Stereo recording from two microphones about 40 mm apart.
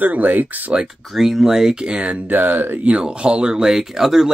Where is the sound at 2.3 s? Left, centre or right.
Right.